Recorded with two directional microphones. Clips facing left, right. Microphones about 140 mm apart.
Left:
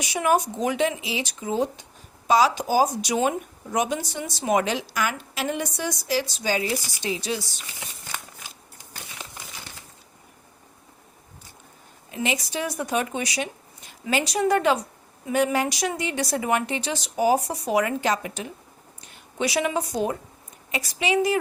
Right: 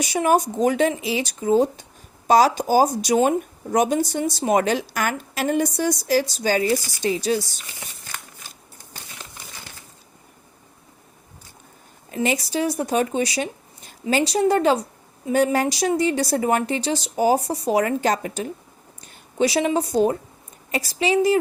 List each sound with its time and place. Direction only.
0.0 s speech: 40° right (ahead or behind)
12.1 s speech: 40° right (ahead or behind)